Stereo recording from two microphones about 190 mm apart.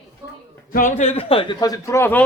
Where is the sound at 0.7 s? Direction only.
40° left (ahead or behind); by 2.3 s 10° left (ahead or behind).